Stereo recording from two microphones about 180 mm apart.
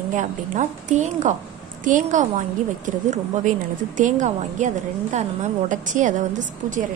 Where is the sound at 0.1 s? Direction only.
40° right (ahead or behind).